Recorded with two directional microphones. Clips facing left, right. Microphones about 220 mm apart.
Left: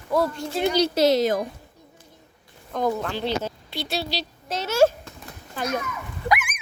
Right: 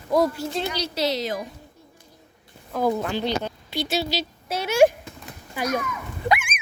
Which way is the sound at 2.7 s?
10° right (ahead or behind).